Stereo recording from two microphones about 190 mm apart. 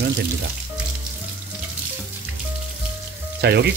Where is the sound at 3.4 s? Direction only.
60° right (ahead or behind).